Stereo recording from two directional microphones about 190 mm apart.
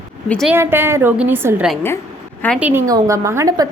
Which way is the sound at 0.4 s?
10° right (ahead or behind).